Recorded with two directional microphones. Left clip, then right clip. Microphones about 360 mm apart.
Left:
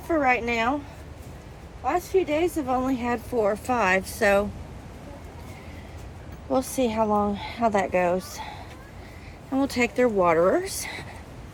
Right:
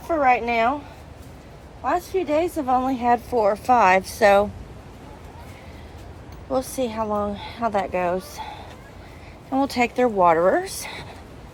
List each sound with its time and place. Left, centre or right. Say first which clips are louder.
0.1 s speech: right 4 dB; centre
1.8 s speech: right 1 dB; centre
6.7 s speech: left 1 dB; centre